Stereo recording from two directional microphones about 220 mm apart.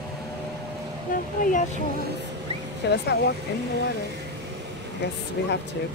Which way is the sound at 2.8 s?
50° left (ahead or behind).